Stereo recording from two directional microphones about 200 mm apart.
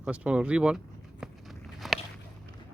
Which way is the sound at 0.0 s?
5° right (ahead or behind).